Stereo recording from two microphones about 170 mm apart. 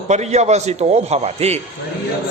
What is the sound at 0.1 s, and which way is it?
A man's voice, 40° right (ahead or behind).